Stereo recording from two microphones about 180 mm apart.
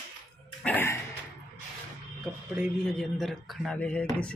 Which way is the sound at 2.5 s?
Centre (ahead or behind).